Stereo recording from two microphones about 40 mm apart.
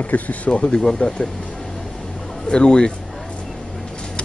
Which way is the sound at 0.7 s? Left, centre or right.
Centre.